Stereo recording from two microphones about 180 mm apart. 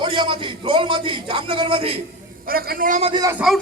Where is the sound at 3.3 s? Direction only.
5° right (ahead or behind).